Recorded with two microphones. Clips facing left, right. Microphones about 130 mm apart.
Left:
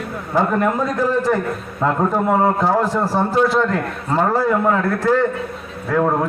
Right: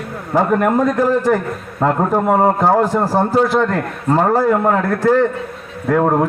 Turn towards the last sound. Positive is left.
turn(degrees=-40)  # may be behind; listen again after turning